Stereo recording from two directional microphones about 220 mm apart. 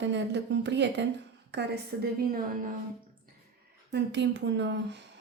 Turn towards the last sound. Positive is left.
turn(degrees=-55)  # may be behind; listen again after turning